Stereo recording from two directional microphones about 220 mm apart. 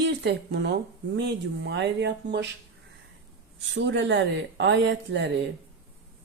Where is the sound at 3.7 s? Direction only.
55° right (ahead or behind).